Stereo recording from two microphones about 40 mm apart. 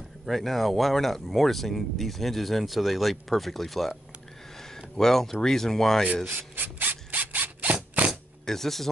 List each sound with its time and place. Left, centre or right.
0.3 s speech: centre
6.2 s ratchet: right
8.5 s speech: centre